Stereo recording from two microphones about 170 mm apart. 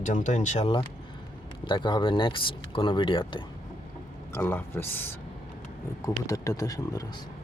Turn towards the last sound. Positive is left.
turn(degrees=20)  # may be behind; listen again after turning